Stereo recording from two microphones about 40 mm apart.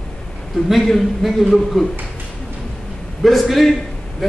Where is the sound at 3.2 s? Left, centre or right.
Centre.